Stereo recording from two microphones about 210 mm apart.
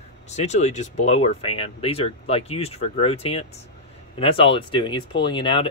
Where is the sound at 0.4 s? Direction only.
30° left (ahead or behind).